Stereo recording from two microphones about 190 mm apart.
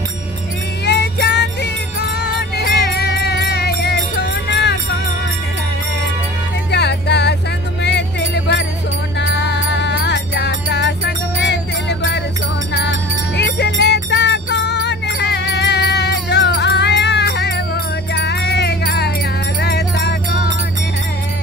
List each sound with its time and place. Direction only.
0.8 s music: 65° left (ahead or behind)
6.7 s music: 65° left (ahead or behind)
9.2 s music: 65° left (ahead or behind)
13.4 s music: 65° left (ahead or behind)